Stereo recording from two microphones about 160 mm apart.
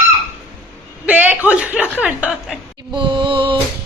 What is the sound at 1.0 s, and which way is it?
Speech, 10° right (ahead or behind).